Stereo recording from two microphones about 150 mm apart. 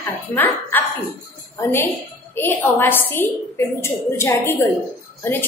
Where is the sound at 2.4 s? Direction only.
15° left (ahead or behind).